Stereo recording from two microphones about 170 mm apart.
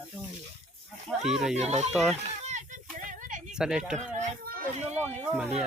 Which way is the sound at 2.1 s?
40° right (ahead or behind).